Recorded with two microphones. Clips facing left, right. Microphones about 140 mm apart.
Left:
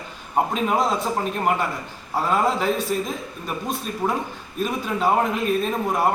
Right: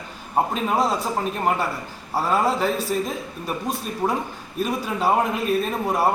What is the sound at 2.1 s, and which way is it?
Speech, 5° right (ahead or behind).